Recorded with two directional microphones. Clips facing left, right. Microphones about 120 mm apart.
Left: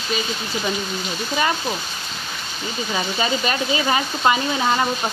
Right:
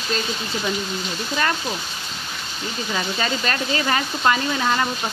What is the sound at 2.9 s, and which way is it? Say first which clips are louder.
Sizzle: left 2 dB; 15° left (ahead or behind).